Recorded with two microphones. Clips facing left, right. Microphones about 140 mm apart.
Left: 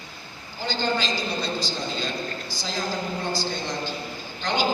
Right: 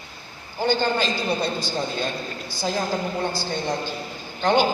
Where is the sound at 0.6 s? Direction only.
55° right (ahead or behind).